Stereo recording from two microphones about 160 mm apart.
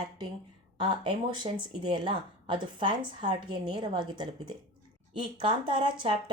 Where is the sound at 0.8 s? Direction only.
30° right (ahead or behind).